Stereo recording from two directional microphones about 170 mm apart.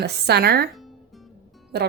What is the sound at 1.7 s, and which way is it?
Speech, 75° right (ahead or behind).